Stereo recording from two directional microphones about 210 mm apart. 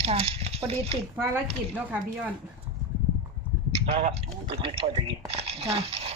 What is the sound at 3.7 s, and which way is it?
A man's voice, 30° right (ahead or behind).